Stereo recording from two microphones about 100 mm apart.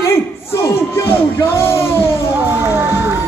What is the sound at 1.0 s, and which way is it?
Music, 25° left (ahead or behind).